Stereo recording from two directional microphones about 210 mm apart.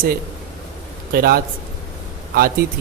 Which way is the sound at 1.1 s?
45° right (ahead or behind).